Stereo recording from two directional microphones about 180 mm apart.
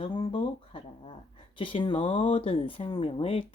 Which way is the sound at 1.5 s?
30° left (ahead or behind).